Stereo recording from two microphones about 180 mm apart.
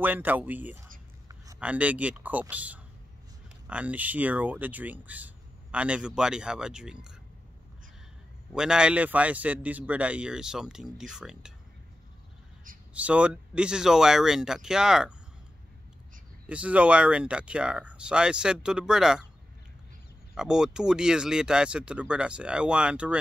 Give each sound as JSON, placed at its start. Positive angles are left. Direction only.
{"t": 0.0, "sound": "speech", "side_deg": -10}
{"t": 1.3, "sound": "a sound", "side_deg": -20}
{"t": 1.6, "sound": "speech", "side_deg": -5}
{"t": 8.5, "sound": "a man's voice", "side_deg": -5}
{"t": 12.9, "sound": "a man's voice", "side_deg": -5}
{"t": 16.4, "sound": "a man's voice", "side_deg": -5}
{"t": 20.3, "sound": "a man's voice", "side_deg": -5}